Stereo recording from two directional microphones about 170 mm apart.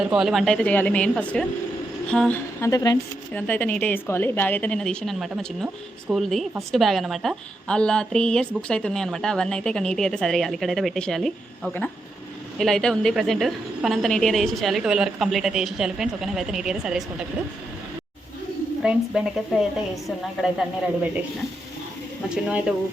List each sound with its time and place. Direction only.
0.0 s a woman's voice: 5° right (ahead or behind); by 3.0 s 20° left (ahead or behind)
3.3 s a woman's voice: 10° left (ahead or behind)
18.8 s a woman's voice: 5° right (ahead or behind)
22.4 s a woman's voice: 5° right (ahead or behind)